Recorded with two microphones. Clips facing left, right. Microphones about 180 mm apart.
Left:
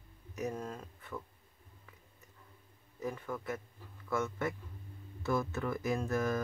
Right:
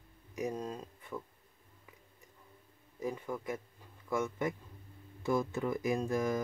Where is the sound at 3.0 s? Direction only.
15° right (ahead or behind).